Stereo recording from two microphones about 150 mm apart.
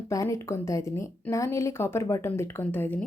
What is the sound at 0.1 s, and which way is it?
A woman's voice, 20° left (ahead or behind).